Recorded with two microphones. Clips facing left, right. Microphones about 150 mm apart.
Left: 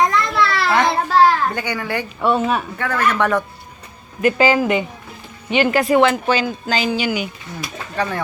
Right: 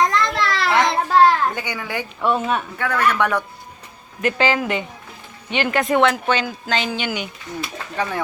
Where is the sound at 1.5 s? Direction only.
10° right (ahead or behind).